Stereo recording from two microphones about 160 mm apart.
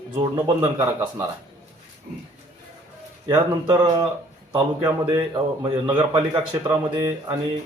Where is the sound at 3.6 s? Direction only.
30° right (ahead or behind).